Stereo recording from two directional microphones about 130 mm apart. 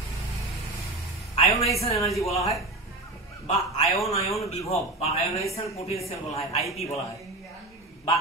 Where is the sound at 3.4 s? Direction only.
60° left (ahead or behind).